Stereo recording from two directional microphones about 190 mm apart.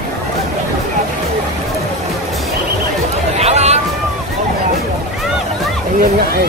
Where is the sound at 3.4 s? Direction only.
35° right (ahead or behind).